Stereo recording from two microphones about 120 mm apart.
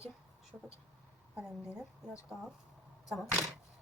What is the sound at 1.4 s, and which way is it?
Speech, 5° right (ahead or behind).